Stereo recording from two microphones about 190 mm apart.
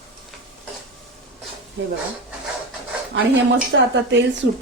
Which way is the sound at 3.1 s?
85° right.